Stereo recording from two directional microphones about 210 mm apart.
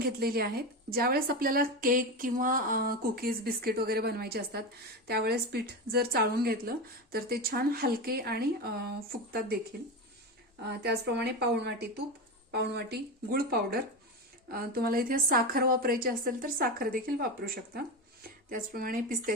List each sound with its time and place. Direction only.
0.0 s a woman's voice: 45° right (ahead or behind)
10.7 s a woman's voice: 50° right (ahead or behind)